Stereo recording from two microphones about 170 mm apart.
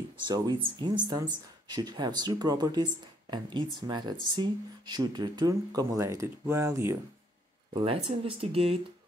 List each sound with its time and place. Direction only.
0.3 s speech: 25° right (ahead or behind)
7.7 s speech: 30° right (ahead or behind)